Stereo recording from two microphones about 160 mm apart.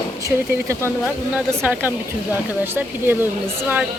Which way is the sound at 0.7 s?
15° right (ahead or behind).